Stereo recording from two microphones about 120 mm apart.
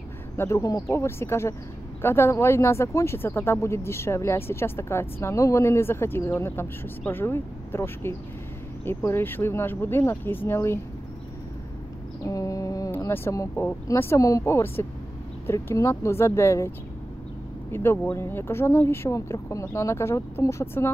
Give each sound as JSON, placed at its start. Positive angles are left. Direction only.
{"t": 0.4, "sound": "speech", "side_deg": 25}
{"t": 12.3, "sound": "a sound", "side_deg": 30}
{"t": 12.9, "sound": "speech", "side_deg": 20}